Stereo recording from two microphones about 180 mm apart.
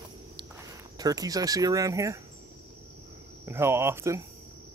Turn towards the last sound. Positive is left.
turn(degrees=-15)  # may be behind; listen again after turning